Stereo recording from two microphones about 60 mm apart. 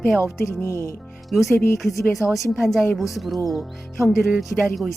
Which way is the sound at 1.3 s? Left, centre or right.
Centre.